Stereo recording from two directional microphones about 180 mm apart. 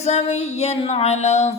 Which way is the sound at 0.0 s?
35° left (ahead or behind).